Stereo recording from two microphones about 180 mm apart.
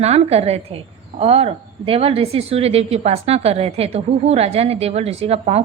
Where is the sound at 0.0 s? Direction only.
35° right (ahead or behind).